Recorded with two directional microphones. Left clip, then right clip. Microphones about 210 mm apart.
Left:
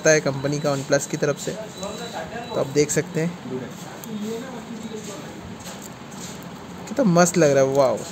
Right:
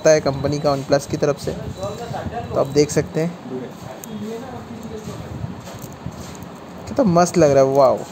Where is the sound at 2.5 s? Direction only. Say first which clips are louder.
Right 4 dB; 10° right (ahead or behind).